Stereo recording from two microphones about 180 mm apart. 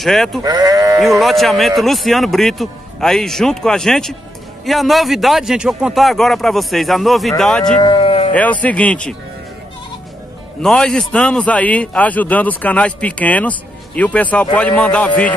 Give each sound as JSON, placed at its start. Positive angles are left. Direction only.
{"t": 0.0, "sound": "a man's voice", "side_deg": 0}
{"t": 0.4, "sound": "speech", "side_deg": -20}
{"t": 1.2, "sound": "a man's voice", "side_deg": 0}
{"t": 7.8, "sound": "moo", "side_deg": 25}
{"t": 8.3, "sound": "a man's voice", "side_deg": 10}
{"t": 10.6, "sound": "a man's voice", "side_deg": 5}